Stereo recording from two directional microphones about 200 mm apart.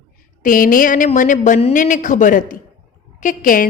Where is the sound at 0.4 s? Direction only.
45° left (ahead or behind).